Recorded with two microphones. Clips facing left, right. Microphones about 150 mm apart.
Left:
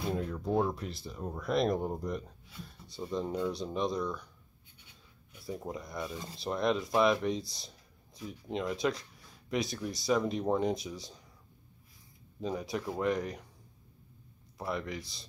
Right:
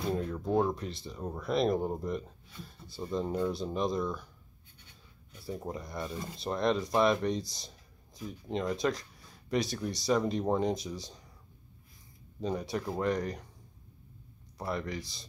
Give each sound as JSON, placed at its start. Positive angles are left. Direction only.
{"t": 0.0, "sound": "speech", "side_deg": 0}
{"t": 5.3, "sound": "speech", "side_deg": 0}
{"t": 12.4, "sound": "speech", "side_deg": 0}
{"t": 14.6, "sound": "speech", "side_deg": 0}